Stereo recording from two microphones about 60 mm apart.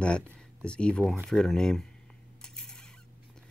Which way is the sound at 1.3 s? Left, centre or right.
Centre.